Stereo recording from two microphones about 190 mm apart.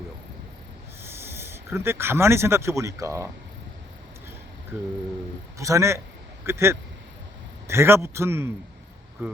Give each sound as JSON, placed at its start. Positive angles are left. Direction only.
{"t": 1.0, "sound": "speech", "side_deg": -15}
{"t": 5.5, "sound": "a man's voice", "side_deg": -15}